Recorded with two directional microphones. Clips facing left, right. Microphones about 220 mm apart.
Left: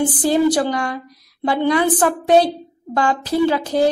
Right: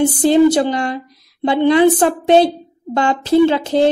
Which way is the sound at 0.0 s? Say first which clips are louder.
Right 5 dB; 25° right (ahead or behind).